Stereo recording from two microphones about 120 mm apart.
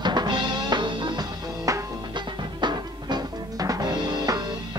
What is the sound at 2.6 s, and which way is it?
Music, 35° right (ahead or behind).